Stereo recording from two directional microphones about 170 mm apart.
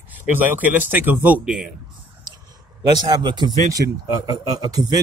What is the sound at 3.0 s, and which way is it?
A man's voice, 25° right (ahead or behind).